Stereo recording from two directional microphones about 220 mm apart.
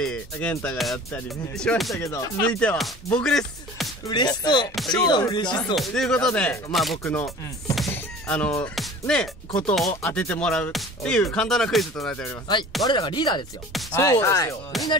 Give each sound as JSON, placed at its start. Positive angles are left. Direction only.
{"t": 0.0, "sound": "speech", "side_deg": 5}
{"t": 2.0, "sound": "speech", "side_deg": 15}
{"t": 4.1, "sound": "speech", "side_deg": 20}
{"t": 5.8, "sound": "speech", "side_deg": 5}
{"t": 12.8, "sound": "speech", "side_deg": 20}